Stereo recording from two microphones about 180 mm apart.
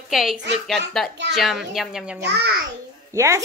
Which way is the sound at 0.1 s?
Centre (ahead or behind).